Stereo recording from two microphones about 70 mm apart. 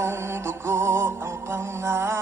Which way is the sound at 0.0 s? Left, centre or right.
Right.